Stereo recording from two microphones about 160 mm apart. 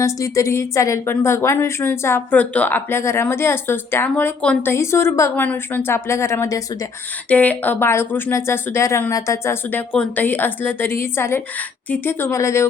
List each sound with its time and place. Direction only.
0.0 s a woman's voice: 20° left (ahead or behind)